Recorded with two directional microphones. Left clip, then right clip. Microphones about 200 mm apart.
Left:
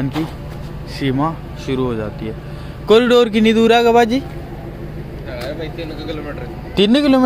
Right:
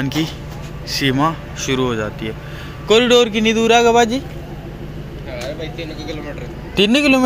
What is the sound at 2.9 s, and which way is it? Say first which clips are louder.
Speech: left 1 dB; 35° left (ahead or behind).